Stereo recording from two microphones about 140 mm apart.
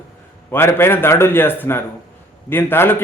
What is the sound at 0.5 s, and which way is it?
A man's voice, 15° left (ahead or behind).